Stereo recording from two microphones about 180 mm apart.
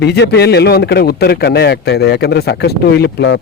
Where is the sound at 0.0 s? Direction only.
65° left (ahead or behind).